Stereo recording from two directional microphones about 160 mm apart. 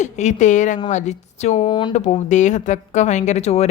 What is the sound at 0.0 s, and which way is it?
Speech, 45° left (ahead or behind).